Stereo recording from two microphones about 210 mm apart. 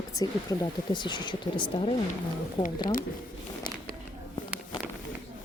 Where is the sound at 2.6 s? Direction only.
40° left (ahead or behind).